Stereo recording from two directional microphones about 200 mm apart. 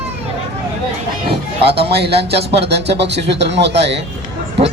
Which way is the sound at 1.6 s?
30° right (ahead or behind).